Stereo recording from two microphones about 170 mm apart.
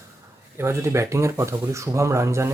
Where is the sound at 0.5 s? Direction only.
15° right (ahead or behind).